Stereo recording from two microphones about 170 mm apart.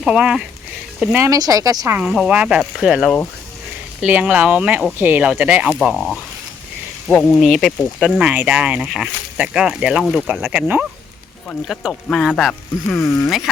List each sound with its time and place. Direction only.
0.0 s speech: 5° right (ahead or behind)
1.2 s speech: 20° right (ahead or behind)
2.0 s speech: 5° right (ahead or behind)